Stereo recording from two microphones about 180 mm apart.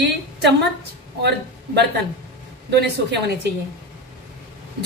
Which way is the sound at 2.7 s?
65° right (ahead or behind).